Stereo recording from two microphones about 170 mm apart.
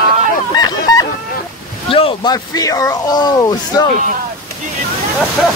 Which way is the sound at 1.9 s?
30° left (ahead or behind).